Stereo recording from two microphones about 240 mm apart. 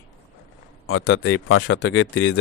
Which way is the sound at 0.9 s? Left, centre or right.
Left.